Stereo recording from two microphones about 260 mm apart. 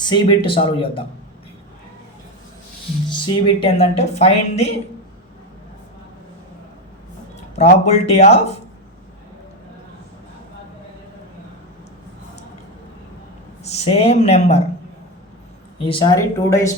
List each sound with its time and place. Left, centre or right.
0.0 s speech: centre
3.1 s speech: left
7.5 s speech: left
13.7 s speech: left
15.8 s speech: centre